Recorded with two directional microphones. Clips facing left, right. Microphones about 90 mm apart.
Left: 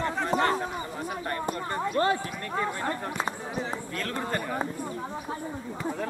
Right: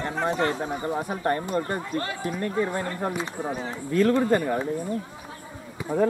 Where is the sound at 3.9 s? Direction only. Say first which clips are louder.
Right 15 dB; 15° right (ahead or behind).